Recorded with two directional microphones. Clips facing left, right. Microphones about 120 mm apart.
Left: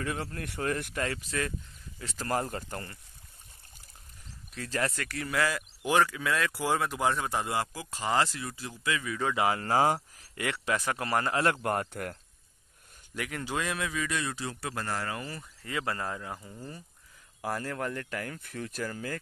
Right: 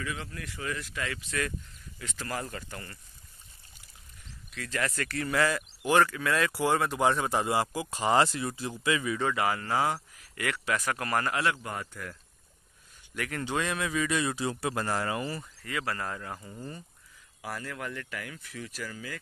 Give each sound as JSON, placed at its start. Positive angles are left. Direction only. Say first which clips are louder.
{"t": 0.0, "sound": "speech", "louder": "left 3 dB", "side_deg": 50}
{"t": 1.0, "sound": "speech", "louder": "right 3 dB", "side_deg": 35}
{"t": 4.6, "sound": "speech", "louder": "left 1 dB", "side_deg": 30}
{"t": 4.9, "sound": "speech", "louder": "right 2 dB", "side_deg": 10}
{"t": 7.6, "sound": "speech", "louder": "right 5 dB", "side_deg": -20}
{"t": 9.3, "sound": "speech", "louder": "left 4 dB", "side_deg": 20}
{"t": 9.6, "sound": "speech", "louder": "left 3 dB", "side_deg": 35}
{"t": 9.9, "sound": "speech", "louder": "left 1 dB", "side_deg": 25}
{"t": 11.6, "sound": "speech", "louder": "left 7 dB", "side_deg": 60}
{"t": 13.3, "sound": "speech", "louder": "right 2 dB", "side_deg": 5}
{"t": 15.6, "sound": "speech", "louder": "left 1 dB", "side_deg": 25}
{"t": 16.3, "sound": "speech", "louder": "right 2 dB", "side_deg": -5}
{"t": 17.6, "sound": "speech", "louder": "left 4 dB", "side_deg": 35}